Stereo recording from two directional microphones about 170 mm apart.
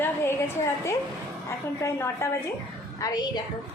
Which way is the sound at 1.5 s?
15° left (ahead or behind).